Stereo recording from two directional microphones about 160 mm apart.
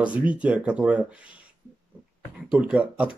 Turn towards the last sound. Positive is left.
turn(degrees=-10)  # may be behind; listen again after turning